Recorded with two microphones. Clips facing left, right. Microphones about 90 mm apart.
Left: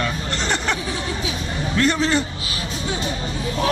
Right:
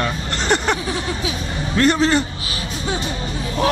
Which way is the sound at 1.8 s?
45° right (ahead or behind).